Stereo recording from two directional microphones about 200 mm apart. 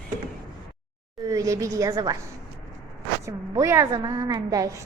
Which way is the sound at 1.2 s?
15° right (ahead or behind).